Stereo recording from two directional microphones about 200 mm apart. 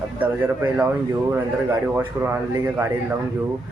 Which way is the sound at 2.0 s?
10° right (ahead or behind).